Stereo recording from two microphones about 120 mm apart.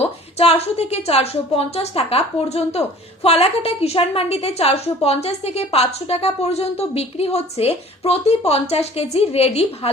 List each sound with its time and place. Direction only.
0.0 s a woman's voice: 60° left (ahead or behind)